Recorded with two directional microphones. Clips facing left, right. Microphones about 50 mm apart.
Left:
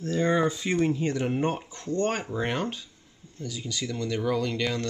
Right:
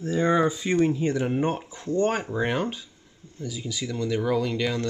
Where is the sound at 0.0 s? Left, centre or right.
Centre.